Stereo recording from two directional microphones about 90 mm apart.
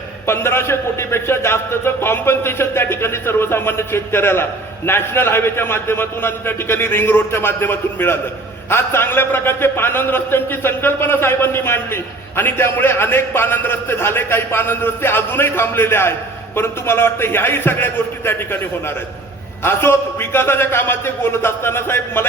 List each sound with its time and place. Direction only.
0.3 s a man's voice: 30° left (ahead or behind)